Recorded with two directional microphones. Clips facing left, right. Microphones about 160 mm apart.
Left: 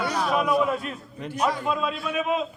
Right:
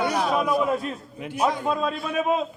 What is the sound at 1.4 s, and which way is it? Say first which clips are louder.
Speech: right 2 dB; 20° right (ahead or behind).